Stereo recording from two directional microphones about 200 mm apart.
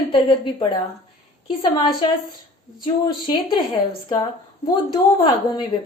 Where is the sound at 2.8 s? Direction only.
25° left (ahead or behind).